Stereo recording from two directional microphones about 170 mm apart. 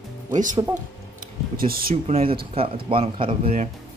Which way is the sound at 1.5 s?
60° right (ahead or behind).